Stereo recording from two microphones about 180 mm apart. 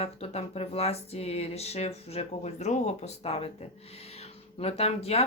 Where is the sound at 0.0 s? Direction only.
35° left (ahead or behind).